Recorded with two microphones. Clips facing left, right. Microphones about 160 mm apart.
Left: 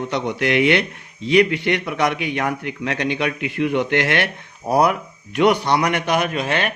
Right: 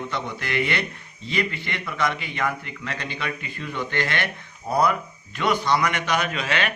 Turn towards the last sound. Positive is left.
turn(degrees=50)  # may be behind; listen again after turning